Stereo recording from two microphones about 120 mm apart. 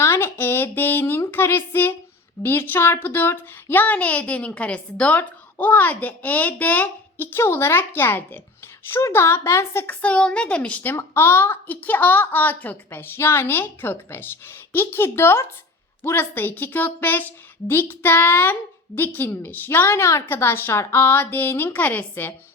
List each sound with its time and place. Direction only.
0.0 s speech: 20° left (ahead or behind)
10.9 s a woman's voice: 20° left (ahead or behind)